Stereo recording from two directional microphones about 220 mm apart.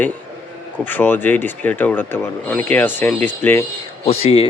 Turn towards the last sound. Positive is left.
turn(degrees=25)  # may be behind; listen again after turning